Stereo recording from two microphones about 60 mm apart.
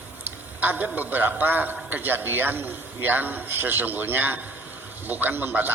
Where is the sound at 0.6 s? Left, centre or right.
Right.